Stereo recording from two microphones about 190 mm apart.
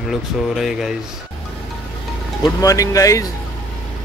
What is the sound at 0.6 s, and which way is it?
Speech, centre (ahead or behind).